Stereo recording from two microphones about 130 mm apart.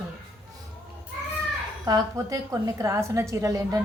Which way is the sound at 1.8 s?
30° right (ahead or behind).